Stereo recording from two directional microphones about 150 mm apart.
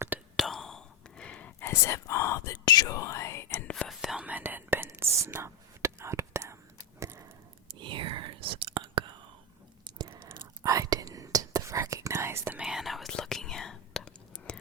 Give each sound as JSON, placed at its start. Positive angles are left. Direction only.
{"t": 0.3, "sound": "whispering", "side_deg": 0}
{"t": 7.0, "sound": "clock", "side_deg": -20}
{"t": 7.8, "sound": "whispering", "side_deg": -35}
{"t": 12.6, "sound": "whispering", "side_deg": 0}